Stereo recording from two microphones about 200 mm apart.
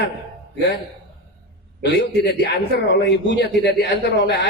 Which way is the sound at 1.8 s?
55° left (ahead or behind).